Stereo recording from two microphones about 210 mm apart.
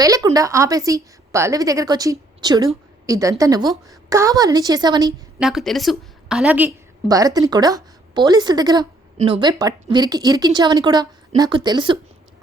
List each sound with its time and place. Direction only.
0.0 s a woman's voice: 15° right (ahead or behind)
5.4 s a woman's voice: centre (ahead or behind); by 11.9 s 20° right (ahead or behind)